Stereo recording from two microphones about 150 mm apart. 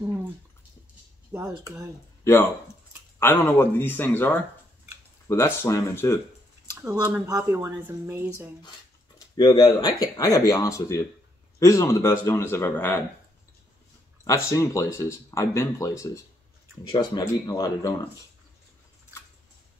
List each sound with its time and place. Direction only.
0.0 s a sound: 10° right (ahead or behind)
1.3 s speech: 15° right (ahead or behind)
3.2 s a man's voice: 15° left (ahead or behind)
6.8 s speech: 20° right (ahead or behind)
9.4 s a man's voice: 25° left (ahead or behind)
14.2 s speech: 20° left (ahead or behind)